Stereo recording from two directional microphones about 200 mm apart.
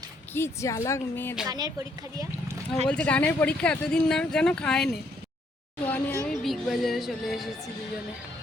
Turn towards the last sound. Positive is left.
turn(degrees=0)  # may be behind; listen again after turning